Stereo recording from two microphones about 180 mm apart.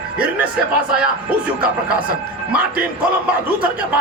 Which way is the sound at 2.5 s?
10° right (ahead or behind).